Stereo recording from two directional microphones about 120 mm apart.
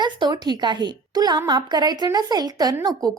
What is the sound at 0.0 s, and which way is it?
A woman's voice, 35° right (ahead or behind).